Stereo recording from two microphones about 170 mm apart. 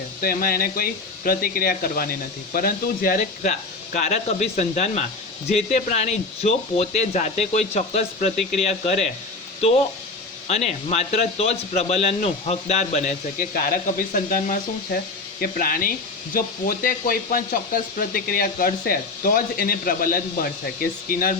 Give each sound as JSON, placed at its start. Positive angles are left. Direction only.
{"t": 0.2, "sound": "speech", "side_deg": 60}
{"t": 3.9, "sound": "a man's voice", "side_deg": 40}
{"t": 10.5, "sound": "a man's voice", "side_deg": 40}